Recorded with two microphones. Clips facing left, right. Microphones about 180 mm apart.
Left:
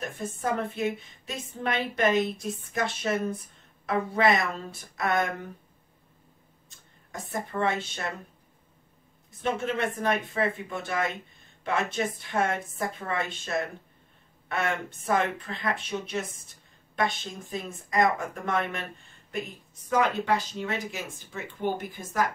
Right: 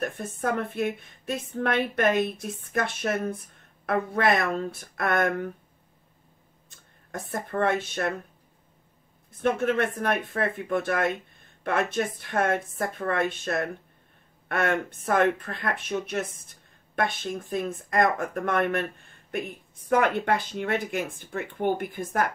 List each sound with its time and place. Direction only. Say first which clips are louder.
0.0 s a woman's voice: right 2 dB; 60° right (ahead or behind)
7.1 s a woman's voice: right 2 dB; 55° right (ahead or behind)
9.4 s a woman's voice: right 4 dB; 55° right (ahead or behind)